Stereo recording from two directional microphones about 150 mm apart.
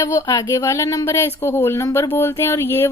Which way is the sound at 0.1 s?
25° left (ahead or behind).